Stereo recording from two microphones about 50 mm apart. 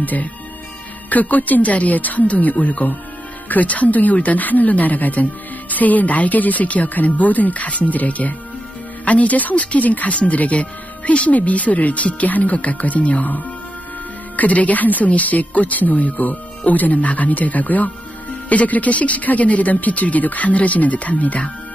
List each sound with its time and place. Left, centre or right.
0.0 s speech: left